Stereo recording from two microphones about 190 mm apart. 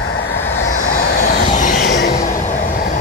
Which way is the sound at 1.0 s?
55° left (ahead or behind).